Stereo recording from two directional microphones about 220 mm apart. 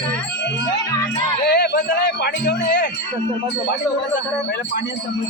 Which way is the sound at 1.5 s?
45° left (ahead or behind).